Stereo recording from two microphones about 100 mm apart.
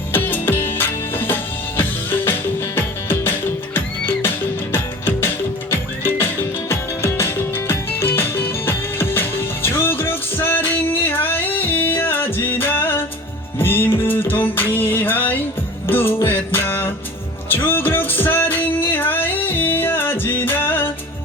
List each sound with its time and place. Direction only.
0.1 s music: 20° left (ahead or behind)